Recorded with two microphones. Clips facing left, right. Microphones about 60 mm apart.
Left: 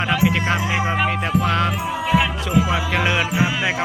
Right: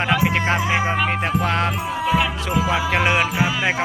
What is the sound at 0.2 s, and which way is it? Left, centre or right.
Music, right.